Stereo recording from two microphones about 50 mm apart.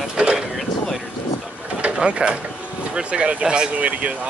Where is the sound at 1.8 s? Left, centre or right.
Centre.